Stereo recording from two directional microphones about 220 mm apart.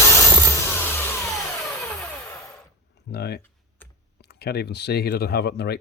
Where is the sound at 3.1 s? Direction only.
45° left (ahead or behind).